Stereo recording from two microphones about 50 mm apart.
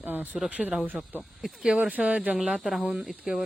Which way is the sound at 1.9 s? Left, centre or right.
Right.